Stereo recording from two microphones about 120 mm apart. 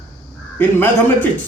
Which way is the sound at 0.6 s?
15° left (ahead or behind).